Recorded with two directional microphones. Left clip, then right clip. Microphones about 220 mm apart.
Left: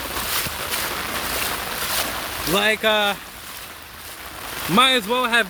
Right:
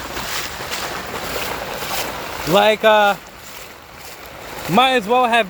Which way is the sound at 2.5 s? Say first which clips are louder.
Right 6 dB; 15° right (ahead or behind).